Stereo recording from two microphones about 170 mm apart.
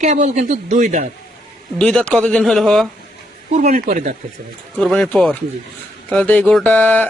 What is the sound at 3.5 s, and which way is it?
Speech, 45° right (ahead or behind).